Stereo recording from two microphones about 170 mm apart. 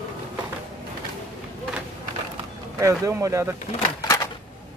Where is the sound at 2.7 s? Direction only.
15° right (ahead or behind).